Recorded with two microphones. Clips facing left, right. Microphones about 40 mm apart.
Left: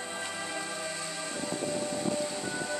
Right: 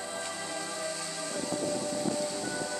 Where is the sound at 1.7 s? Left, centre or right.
Centre.